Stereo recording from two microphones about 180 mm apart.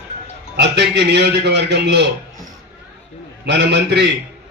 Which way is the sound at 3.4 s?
70° right (ahead or behind).